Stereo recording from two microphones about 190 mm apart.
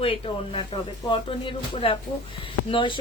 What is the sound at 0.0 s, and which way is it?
Speech, 30° left (ahead or behind).